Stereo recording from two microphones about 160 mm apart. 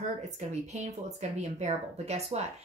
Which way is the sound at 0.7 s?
45° right (ahead or behind).